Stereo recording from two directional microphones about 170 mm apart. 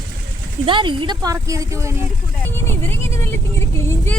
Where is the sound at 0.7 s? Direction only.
30° right (ahead or behind).